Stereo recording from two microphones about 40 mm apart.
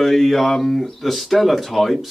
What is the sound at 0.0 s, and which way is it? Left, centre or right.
Speech, centre.